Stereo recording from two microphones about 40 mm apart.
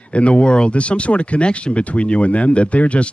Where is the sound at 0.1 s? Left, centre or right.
Left.